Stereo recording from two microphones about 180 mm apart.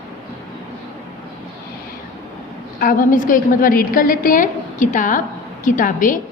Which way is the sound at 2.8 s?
50° left (ahead or behind).